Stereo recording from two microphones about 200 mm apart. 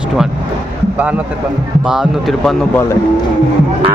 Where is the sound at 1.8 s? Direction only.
Centre (ahead or behind).